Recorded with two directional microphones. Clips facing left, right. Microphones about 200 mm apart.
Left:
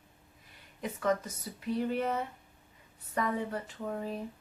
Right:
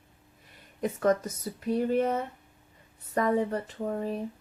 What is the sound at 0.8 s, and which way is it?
Speech, 45° right (ahead or behind).